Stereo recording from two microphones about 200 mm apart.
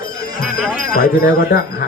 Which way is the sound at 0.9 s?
45° left (ahead or behind).